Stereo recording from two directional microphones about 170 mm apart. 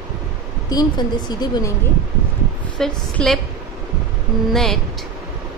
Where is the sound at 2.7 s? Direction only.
5° left (ahead or behind).